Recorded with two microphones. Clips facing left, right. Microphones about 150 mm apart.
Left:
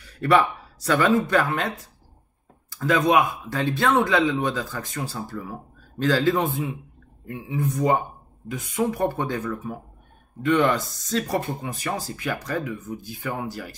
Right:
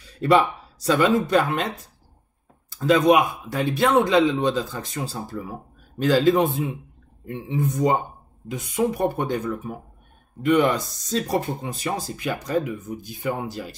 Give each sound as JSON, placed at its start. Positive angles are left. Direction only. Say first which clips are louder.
{"t": 0.0, "sound": "speech", "louder": "right 1 dB", "side_deg": -20}
{"t": 2.7, "sound": "speech", "louder": "right 3 dB", "side_deg": -20}